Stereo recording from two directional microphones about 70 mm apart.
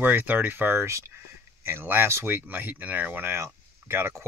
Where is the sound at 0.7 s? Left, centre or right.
Right.